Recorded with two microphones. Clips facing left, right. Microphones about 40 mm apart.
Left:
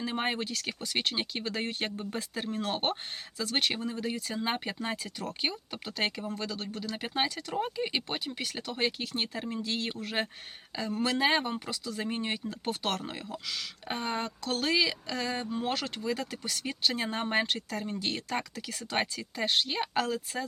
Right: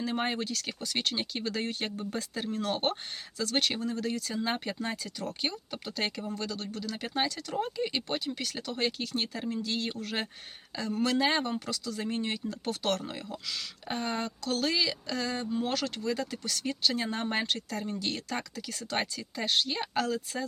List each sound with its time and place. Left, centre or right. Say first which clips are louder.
0.0 s speech: even; left
17.7 s speech: even; centre
18.0 s speech: left 1 dB; centre